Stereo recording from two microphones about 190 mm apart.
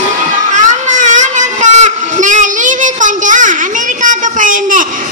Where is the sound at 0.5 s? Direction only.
40° right (ahead or behind).